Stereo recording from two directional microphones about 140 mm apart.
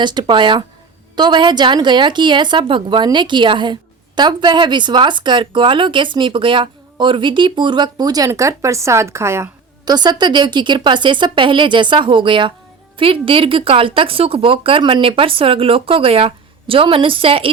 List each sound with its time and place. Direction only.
0.0 s speech: 35° right (ahead or behind)
9.9 s speech: 30° right (ahead or behind)